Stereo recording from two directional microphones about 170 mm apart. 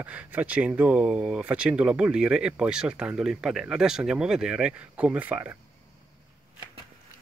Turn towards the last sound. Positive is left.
turn(degrees=-10)  # may be behind; listen again after turning